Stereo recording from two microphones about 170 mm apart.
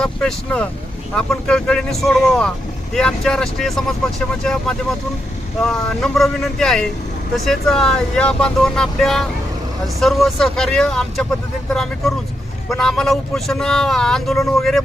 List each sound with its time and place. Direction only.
0.0 s speech: 5° left (ahead or behind)
5.6 s speech: centre (ahead or behind)